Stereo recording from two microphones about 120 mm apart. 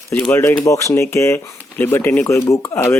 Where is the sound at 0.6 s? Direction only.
25° left (ahead or behind).